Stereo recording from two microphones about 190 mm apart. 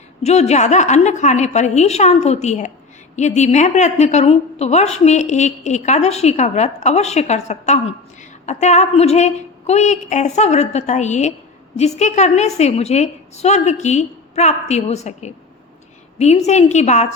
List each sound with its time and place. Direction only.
0.2 s a woman's voice: 35° left (ahead or behind)